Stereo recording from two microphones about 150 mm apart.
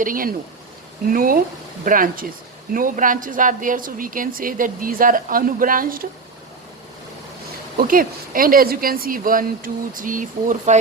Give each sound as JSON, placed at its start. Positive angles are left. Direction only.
{"t": 0.0, "sound": "speech", "side_deg": -70}
{"t": 7.8, "sound": "speech", "side_deg": -70}